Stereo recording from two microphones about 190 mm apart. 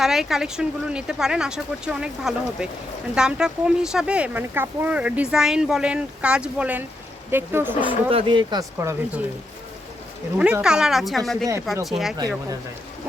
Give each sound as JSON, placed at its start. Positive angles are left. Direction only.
{"t": 0.0, "sound": "speech", "side_deg": 0}
{"t": 8.1, "sound": "speech", "side_deg": -25}
{"t": 10.3, "sound": "speech", "side_deg": -5}